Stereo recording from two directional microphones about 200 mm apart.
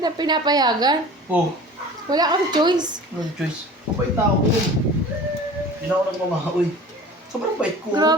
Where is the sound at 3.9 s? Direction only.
10° right (ahead or behind).